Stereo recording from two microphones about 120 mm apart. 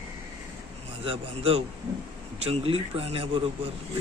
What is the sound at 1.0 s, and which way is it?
A man's voice, 50° right (ahead or behind).